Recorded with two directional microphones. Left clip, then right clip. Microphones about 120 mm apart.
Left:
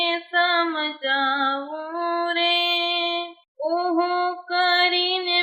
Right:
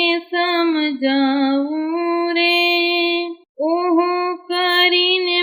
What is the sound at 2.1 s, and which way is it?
Music, 35° right (ahead or behind).